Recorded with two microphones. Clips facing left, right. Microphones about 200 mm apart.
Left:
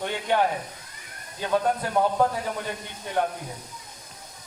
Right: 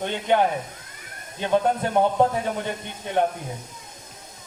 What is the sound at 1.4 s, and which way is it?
Speech, 25° right (ahead or behind).